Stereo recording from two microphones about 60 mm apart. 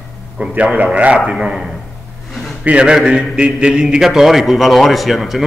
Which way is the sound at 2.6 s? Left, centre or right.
Centre.